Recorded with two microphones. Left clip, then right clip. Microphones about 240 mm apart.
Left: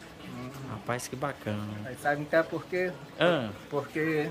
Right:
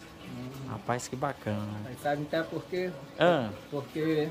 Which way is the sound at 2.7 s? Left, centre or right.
Centre.